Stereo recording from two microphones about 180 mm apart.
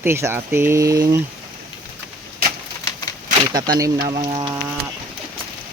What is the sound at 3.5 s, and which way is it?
Speech, 25° right (ahead or behind).